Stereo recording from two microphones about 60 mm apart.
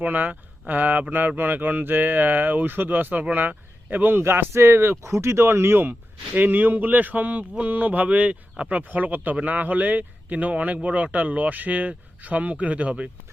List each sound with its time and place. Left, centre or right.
0.0 s a man's voice: right